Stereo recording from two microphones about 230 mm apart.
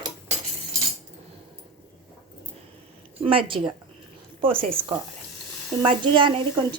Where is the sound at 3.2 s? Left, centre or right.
Right.